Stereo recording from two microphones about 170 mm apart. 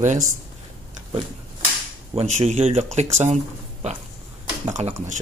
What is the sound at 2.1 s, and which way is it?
Speech, 40° right (ahead or behind).